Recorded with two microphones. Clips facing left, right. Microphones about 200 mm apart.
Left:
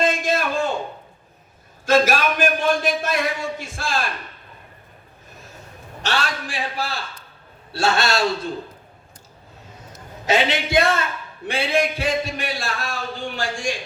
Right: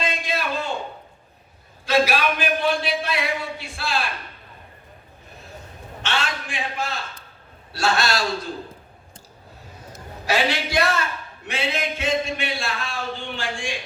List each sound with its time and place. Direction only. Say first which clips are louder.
0.0 s a sound: left 6 dB; 45° left (ahead or behind)
1.9 s a man's voice: left 2 dB; 45° left (ahead or behind)
6.0 s a man's voice: left 2 dB; 40° left (ahead or behind)
10.2 s a man's voice: left 3 dB; 20° left (ahead or behind); by 13.7 s 40° left (ahead or behind)